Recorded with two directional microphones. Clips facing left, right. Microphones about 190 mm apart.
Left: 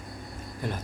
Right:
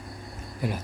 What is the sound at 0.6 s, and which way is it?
Speech, 10° right (ahead or behind).